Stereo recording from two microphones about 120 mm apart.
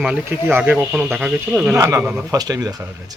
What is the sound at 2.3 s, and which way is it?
Speech, 30° right (ahead or behind).